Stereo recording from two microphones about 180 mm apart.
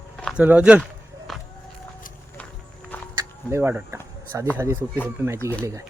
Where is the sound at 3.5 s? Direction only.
10° right (ahead or behind).